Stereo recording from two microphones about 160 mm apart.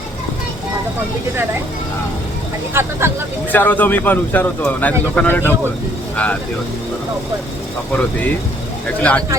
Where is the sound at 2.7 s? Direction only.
15° right (ahead or behind).